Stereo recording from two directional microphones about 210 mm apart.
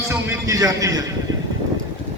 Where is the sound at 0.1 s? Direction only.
15° right (ahead or behind).